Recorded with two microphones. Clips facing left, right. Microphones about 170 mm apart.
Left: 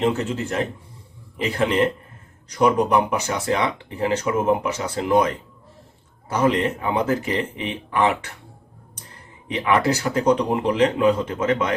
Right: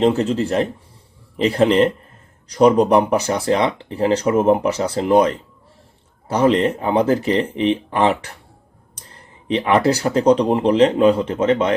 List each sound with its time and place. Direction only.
0.0 s speech: 35° right (ahead or behind)
9.5 s speech: 30° right (ahead or behind)